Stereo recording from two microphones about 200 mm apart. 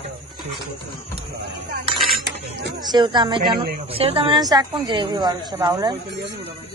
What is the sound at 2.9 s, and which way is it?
Speech, 25° right (ahead or behind).